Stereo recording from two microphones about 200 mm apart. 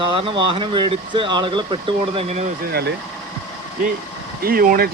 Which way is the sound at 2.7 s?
55° right (ahead or behind).